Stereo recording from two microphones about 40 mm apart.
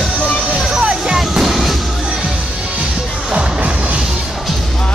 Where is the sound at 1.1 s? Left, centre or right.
Centre.